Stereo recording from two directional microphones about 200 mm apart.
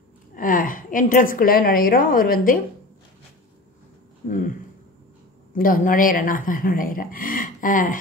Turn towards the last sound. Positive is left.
turn(degrees=40)  # may be behind; listen again after turning